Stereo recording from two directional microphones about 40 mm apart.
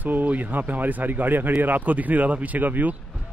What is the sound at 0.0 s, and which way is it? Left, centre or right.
Speech, right.